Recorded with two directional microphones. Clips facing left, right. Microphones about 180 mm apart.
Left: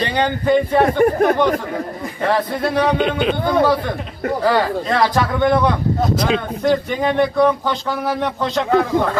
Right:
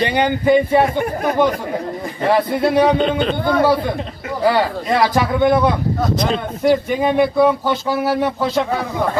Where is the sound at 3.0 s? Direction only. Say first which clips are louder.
Right 1 dB; 5° left (ahead or behind).